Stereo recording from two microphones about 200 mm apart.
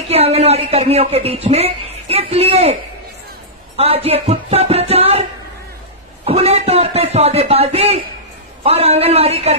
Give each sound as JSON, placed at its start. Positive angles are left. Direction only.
{"t": 0.1, "sound": "speech", "side_deg": -30}
{"t": 6.2, "sound": "speech", "side_deg": -30}